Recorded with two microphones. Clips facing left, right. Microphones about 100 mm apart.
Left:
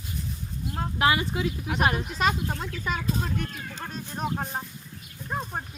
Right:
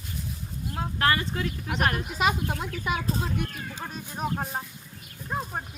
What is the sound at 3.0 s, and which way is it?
Speech, 35° right (ahead or behind).